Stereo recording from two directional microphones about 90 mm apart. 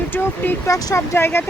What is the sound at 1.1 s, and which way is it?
Speech, 25° left (ahead or behind).